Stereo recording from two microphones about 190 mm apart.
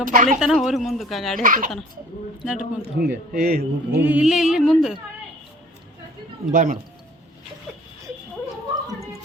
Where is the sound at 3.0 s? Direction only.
55° right (ahead or behind).